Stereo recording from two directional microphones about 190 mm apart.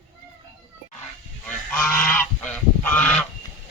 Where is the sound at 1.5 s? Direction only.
10° left (ahead or behind).